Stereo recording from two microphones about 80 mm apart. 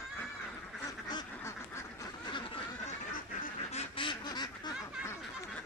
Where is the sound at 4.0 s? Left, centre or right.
Left.